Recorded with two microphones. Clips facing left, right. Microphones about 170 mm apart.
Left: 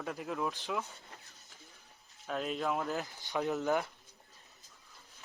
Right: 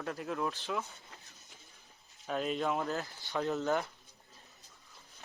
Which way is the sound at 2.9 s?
15° left (ahead or behind).